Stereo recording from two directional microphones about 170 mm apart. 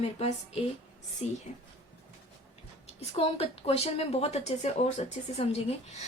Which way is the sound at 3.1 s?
35° left (ahead or behind).